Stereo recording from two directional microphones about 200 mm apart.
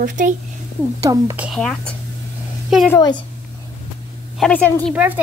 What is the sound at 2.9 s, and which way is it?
Speech, 20° left (ahead or behind).